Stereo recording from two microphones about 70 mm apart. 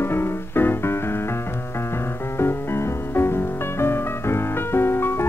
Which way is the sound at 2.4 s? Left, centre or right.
Left.